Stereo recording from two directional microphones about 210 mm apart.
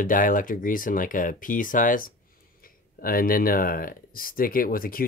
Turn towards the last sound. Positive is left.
turn(degrees=45)  # may be behind; listen again after turning